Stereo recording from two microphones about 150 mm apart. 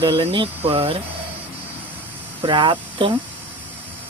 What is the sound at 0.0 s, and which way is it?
Speech, 35° right (ahead or behind).